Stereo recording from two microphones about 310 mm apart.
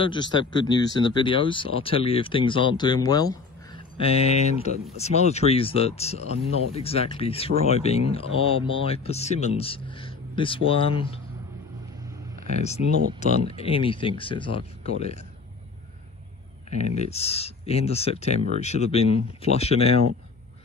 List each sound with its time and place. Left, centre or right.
0.0 s speech: centre
12.4 s speech: left
16.7 s speech: left